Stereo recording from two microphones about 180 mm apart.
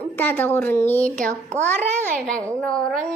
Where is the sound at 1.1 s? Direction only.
45° right (ahead or behind).